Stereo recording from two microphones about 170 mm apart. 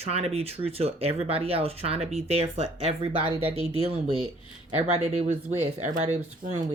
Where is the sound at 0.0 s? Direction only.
35° right (ahead or behind).